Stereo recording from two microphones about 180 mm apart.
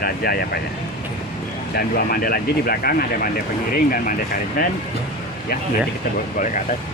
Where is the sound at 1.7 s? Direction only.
55° left (ahead or behind).